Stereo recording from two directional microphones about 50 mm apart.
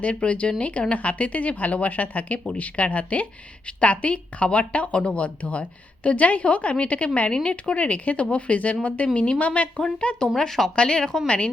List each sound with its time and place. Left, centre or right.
0.0 s a woman's voice: left